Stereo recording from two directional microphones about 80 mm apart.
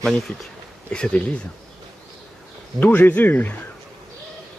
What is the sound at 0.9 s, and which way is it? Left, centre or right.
Speech, centre.